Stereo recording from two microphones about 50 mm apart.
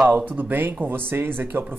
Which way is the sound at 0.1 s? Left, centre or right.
Right.